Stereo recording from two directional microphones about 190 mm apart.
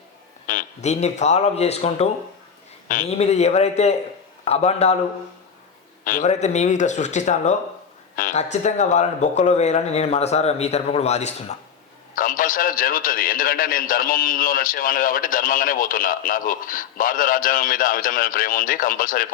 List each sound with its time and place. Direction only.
0.4 s speech: 40° left (ahead or behind)
6.1 s a man's voice: 40° left (ahead or behind)